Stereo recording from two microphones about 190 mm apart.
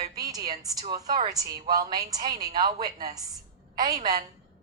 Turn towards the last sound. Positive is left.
turn(degrees=-20)  # may be behind; listen again after turning